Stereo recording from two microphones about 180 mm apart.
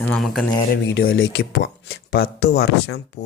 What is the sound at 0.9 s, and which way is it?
Speech, 80° left.